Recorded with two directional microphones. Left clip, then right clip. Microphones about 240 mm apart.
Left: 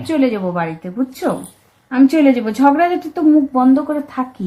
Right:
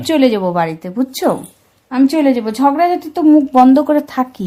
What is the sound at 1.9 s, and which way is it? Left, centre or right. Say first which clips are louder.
A woman's voice: even; right.